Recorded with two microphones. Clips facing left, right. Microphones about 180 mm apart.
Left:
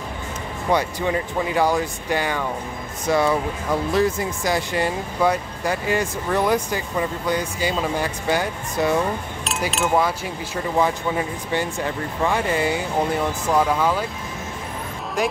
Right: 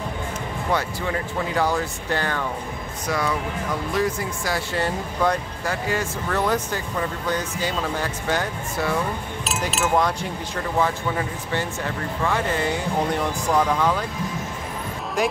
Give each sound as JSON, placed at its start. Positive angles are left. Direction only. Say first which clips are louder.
{"t": 0.7, "sound": "speech", "louder": "left 4 dB", "side_deg": 15}
{"t": 3.1, "sound": "speech", "louder": "left 5 dB", "side_deg": 25}
{"t": 9.7, "sound": "speech", "louder": "left 1 dB", "side_deg": 0}